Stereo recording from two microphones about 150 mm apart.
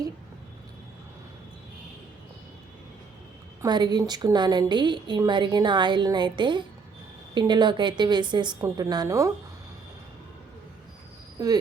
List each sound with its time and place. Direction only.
3.6 s a woman's voice: 30° right (ahead or behind)
11.3 s speech: 25° right (ahead or behind)